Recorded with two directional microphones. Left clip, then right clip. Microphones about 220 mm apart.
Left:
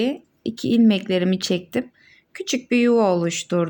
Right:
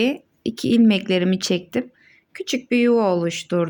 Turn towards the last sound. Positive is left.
turn(degrees=0)  # may be behind; listen again after turning